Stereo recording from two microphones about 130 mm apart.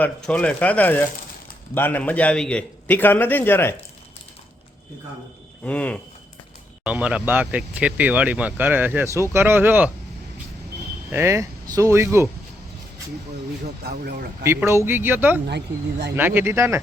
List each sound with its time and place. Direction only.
0.0 s a man's voice: 10° left (ahead or behind)
5.6 s a man's voice: 10° left (ahead or behind)
6.8 s speech: 10° right (ahead or behind)
11.1 s speech: 20° right (ahead or behind)
14.4 s speech: 20° right (ahead or behind)